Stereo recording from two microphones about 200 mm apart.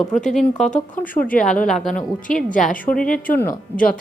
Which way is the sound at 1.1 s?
45° left (ahead or behind).